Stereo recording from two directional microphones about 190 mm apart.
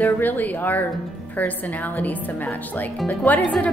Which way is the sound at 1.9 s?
10° left (ahead or behind).